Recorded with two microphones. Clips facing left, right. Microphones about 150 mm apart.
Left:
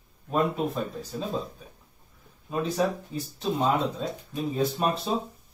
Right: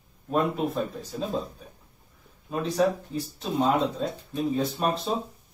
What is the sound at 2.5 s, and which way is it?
Speech, centre (ahead or behind).